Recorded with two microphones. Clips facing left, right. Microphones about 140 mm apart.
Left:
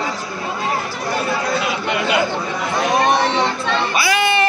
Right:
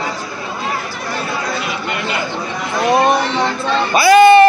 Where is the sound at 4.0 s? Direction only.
45° right (ahead or behind).